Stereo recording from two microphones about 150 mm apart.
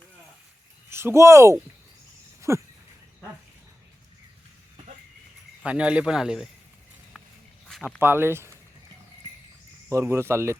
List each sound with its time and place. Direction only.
0.9 s speech: 15° right (ahead or behind)
2.5 s a sound: 20° right (ahead or behind)
5.6 s speech: 5° right (ahead or behind)
7.7 s a sound: centre (ahead or behind)
7.9 s speech: 15° right (ahead or behind)
9.9 s speech: 15° right (ahead or behind)